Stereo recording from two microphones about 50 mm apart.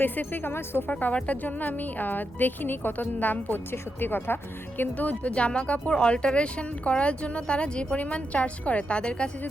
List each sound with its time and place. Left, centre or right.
0.0 s speech: left
0.9 s a woman's voice: left
4.8 s speech: left